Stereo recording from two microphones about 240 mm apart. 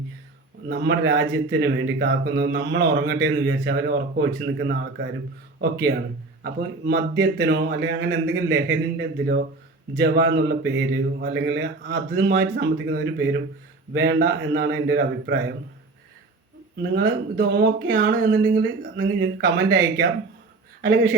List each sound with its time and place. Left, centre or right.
0.7 s speech: right
6.4 s a man's voice: right
16.9 s speech: right